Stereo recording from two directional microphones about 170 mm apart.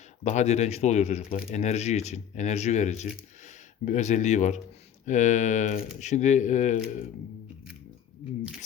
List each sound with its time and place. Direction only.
0.3 s speech: 40° left (ahead or behind)